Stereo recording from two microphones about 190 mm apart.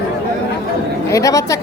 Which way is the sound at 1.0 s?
15° left (ahead or behind).